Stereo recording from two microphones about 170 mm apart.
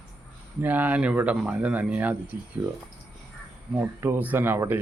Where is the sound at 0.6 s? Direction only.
10° right (ahead or behind).